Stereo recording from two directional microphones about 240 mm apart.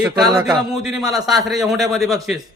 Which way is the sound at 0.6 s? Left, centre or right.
Centre.